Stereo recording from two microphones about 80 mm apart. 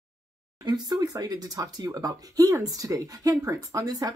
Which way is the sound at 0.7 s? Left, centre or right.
Right.